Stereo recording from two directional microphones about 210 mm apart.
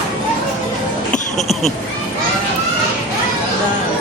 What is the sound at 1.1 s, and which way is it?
Music, 35° left (ahead or behind).